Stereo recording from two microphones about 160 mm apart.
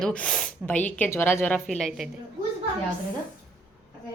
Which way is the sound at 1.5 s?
Centre (ahead or behind).